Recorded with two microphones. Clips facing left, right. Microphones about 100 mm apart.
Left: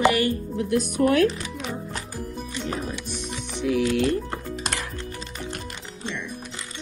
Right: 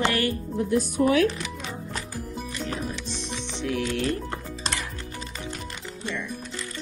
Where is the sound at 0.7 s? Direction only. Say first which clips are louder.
Left 1 dB; 60° left (ahead or behind).